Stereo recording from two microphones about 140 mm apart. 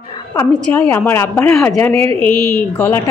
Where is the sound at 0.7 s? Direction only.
15° left (ahead or behind).